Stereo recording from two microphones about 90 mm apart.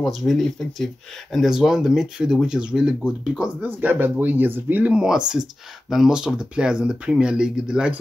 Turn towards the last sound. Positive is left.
turn(degrees=-10)  # may be behind; listen again after turning